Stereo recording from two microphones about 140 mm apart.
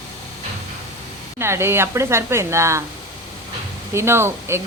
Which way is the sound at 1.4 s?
15° right (ahead or behind).